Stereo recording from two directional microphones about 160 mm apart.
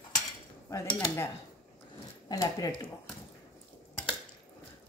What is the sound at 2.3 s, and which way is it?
Dishes, 20° left (ahead or behind).